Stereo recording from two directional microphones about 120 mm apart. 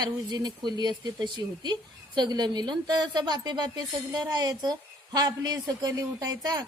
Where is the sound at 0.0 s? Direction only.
35° right (ahead or behind).